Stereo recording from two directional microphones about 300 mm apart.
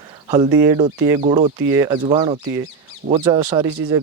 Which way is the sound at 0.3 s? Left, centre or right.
Centre.